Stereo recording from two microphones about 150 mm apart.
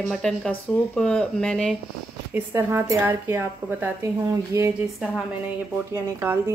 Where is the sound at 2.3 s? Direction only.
15° right (ahead or behind).